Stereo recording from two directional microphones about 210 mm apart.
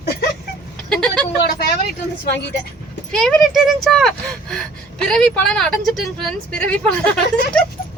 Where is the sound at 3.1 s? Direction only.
Centre (ahead or behind).